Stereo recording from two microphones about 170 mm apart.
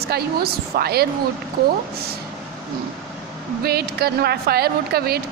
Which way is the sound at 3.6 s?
70° right (ahead or behind).